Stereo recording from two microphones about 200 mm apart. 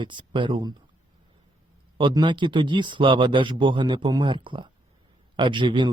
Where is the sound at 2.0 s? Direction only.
25° right (ahead or behind).